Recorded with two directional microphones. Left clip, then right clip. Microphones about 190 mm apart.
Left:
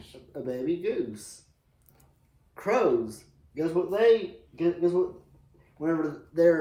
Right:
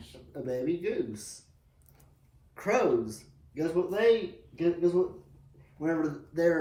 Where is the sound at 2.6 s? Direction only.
20° left (ahead or behind).